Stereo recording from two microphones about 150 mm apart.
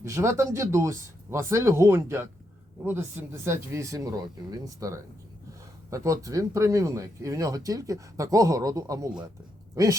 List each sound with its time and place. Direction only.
0.0 s speech: 20° right (ahead or behind)
3.4 s speech: 20° right (ahead or behind)